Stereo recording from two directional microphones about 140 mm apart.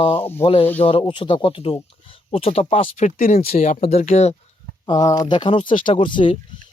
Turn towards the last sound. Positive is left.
turn(degrees=35)  # may be behind; listen again after turning